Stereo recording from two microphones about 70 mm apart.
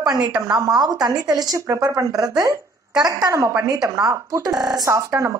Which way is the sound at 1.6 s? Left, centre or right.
Right.